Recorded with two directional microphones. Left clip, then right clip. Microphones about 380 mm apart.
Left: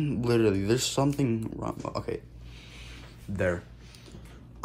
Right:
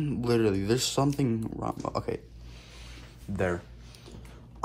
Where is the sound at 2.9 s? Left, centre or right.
Centre.